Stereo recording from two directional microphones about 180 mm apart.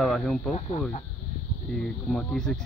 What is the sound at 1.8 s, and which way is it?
Speech, 5° left (ahead or behind).